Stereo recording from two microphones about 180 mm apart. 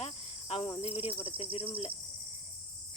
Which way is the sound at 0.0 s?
35° left (ahead or behind).